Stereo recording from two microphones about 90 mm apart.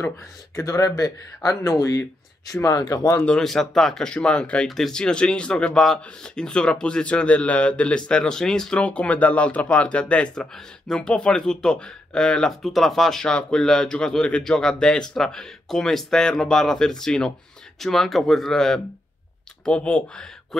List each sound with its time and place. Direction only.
0.6 s speech: 40° left (ahead or behind)
3.3 s speech: 5° left (ahead or behind)